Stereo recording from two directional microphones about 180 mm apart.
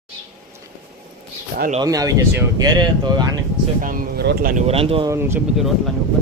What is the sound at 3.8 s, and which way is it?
Speech, 60° right (ahead or behind).